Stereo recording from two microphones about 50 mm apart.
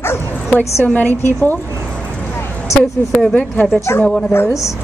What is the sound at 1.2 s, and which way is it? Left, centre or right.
Speech, left.